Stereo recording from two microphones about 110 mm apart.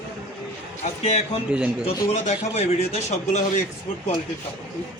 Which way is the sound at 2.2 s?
80° left.